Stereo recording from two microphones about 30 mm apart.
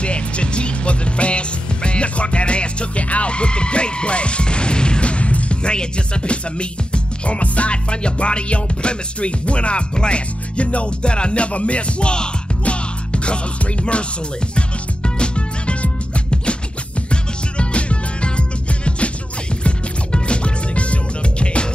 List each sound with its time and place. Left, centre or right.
0.0 s music: left
5.6 s speech: left
15.1 s music: left
19.6 s music: left